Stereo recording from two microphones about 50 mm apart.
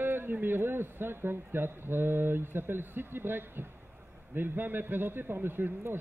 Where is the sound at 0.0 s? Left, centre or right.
Right.